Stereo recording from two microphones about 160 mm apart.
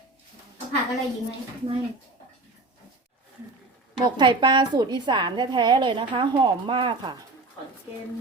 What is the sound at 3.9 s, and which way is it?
A woman's voice, 30° right (ahead or behind).